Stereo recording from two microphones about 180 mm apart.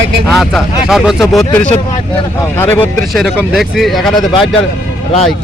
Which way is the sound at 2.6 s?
10° left (ahead or behind).